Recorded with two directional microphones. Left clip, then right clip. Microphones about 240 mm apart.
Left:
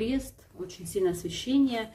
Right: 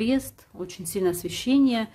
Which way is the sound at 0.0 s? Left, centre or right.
Right.